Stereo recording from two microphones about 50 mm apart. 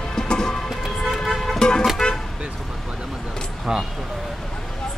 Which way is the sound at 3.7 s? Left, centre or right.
Centre.